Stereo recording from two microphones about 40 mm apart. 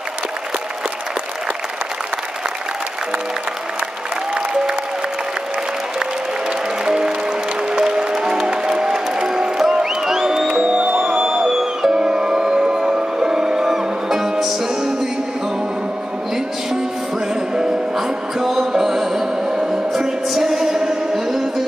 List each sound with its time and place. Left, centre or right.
6.8 s music: centre
10.5 s music: right
17.9 s music: centre
21.3 s music: centre